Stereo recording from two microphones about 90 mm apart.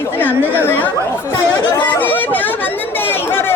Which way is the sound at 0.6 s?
25° left (ahead or behind).